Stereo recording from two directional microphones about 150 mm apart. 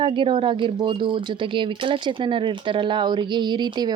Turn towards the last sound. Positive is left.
turn(degrees=-30)  # may be behind; listen again after turning